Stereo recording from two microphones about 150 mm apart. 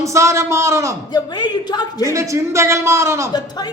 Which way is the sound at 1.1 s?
25° left (ahead or behind).